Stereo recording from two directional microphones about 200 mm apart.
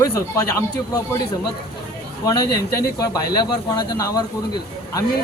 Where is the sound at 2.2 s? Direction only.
20° left (ahead or behind).